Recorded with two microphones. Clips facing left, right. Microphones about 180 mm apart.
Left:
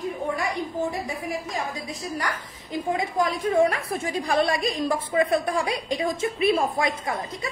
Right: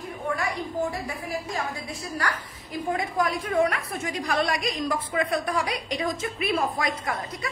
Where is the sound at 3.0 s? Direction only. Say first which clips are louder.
Left 2 dB; 25° left (ahead or behind).